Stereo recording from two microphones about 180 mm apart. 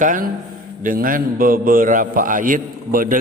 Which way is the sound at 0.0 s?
45° right (ahead or behind).